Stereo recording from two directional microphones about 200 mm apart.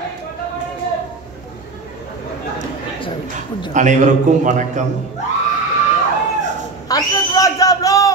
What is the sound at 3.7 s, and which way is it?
A man's voice, 40° right (ahead or behind).